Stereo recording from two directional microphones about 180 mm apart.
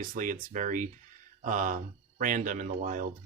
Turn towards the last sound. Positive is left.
turn(degrees=-45)  # may be behind; listen again after turning